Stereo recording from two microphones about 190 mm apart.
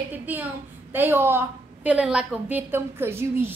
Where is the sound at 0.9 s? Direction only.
10° right (ahead or behind).